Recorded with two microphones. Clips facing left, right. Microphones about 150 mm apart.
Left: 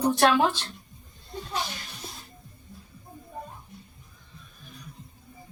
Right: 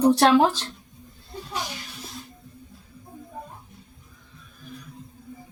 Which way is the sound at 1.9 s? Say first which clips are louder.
Right 1 dB; centre (ahead or behind).